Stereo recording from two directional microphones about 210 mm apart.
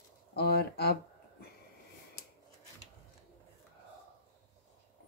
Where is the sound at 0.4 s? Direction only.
50° left (ahead or behind).